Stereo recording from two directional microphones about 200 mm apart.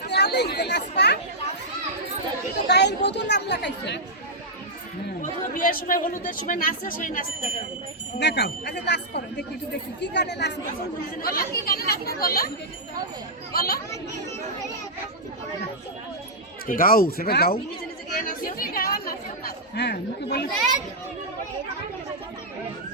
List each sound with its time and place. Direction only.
0.1 s chatter: 55° left (ahead or behind)
2.6 s chatter: 60° left (ahead or behind)
5.2 s chatter: 45° left (ahead or behind)
6.1 s speech: 40° left (ahead or behind)
8.2 s speech: 55° left (ahead or behind)
11.2 s speech: 45° left (ahead or behind)
13.5 s speech: 50° left (ahead or behind)
16.6 s speech: 45° left (ahead or behind)
18.1 s chatter: 45° left (ahead or behind)